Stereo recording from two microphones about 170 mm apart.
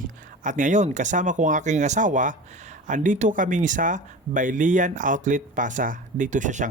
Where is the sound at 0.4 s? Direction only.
45° right (ahead or behind).